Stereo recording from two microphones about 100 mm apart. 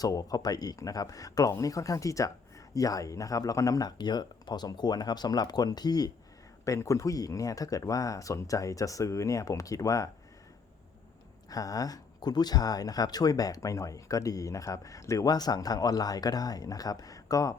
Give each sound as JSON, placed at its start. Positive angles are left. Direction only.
{"t": 0.0, "sound": "speech", "side_deg": 35}
{"t": 11.4, "sound": "speech", "side_deg": 40}